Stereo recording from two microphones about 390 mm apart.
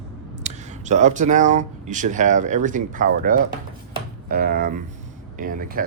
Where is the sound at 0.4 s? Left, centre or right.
Centre.